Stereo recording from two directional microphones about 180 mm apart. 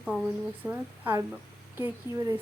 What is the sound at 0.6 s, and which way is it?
Speech, 10° right (ahead or behind).